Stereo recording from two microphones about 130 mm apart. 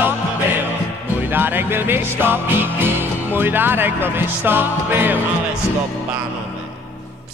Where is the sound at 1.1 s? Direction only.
15° right (ahead or behind).